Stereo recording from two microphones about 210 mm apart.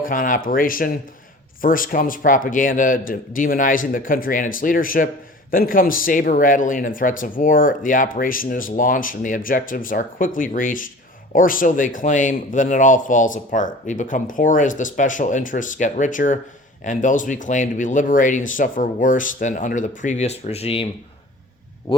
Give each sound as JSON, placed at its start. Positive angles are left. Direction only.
{"t": 0.0, "sound": "speech", "side_deg": 40}